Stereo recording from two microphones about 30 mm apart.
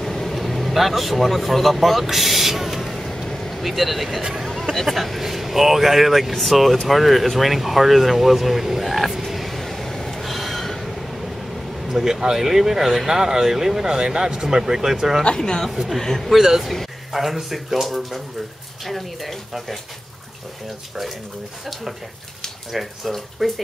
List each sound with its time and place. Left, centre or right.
0.0 s vehicle: centre
0.7 s speech: centre
3.3 s vehicle: centre
3.6 s speech: centre
10.2 s train: centre
11.9 s speech: centre
15.3 s speech: left
16.0 s speech: centre
16.3 s speech: centre
17.1 s speech: centre
22.7 s speech: centre
23.0 s speech: centre